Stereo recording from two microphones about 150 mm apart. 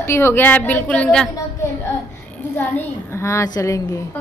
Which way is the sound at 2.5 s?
15° left (ahead or behind).